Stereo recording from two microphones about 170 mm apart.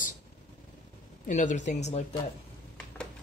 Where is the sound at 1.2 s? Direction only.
45° left (ahead or behind).